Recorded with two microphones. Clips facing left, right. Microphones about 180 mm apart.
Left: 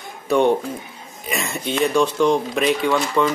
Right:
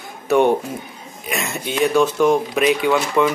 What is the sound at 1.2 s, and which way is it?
A man's voice, 5° right (ahead or behind).